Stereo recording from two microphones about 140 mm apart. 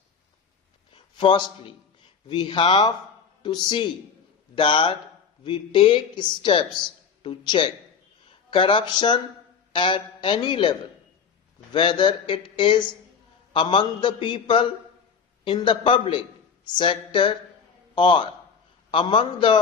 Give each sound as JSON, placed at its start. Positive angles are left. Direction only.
{"t": 0.9, "sound": "a man's voice", "side_deg": 35}